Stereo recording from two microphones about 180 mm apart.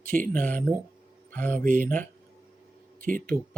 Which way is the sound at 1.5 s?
50° right (ahead or behind).